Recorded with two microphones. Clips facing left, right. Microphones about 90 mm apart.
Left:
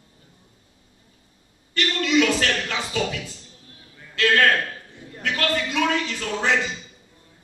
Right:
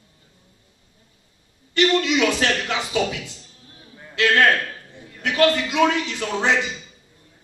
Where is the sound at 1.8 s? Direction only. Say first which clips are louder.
Right 2 dB; 20° right (ahead or behind).